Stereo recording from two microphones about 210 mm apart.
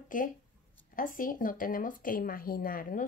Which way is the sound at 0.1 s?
40° left (ahead or behind).